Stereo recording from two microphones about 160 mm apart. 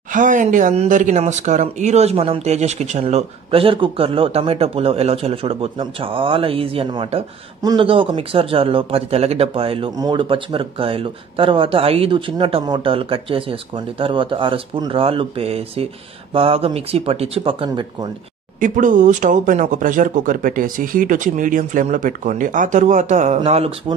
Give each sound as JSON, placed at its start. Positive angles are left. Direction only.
{"t": 0.1, "sound": "speech", "side_deg": -55}
{"t": 9.8, "sound": "speech", "side_deg": -25}
{"t": 18.6, "sound": "speech", "side_deg": -55}